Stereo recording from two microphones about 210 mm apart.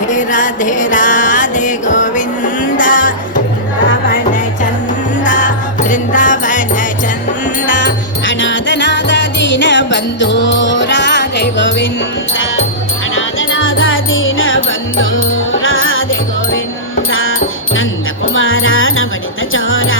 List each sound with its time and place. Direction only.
0.1 s music: 40° left (ahead or behind)
7.9 s music: 60° left (ahead or behind)
13.1 s music: 70° left (ahead or behind)
17.1 s music: 70° left (ahead or behind)
18.3 s music: 70° left (ahead or behind)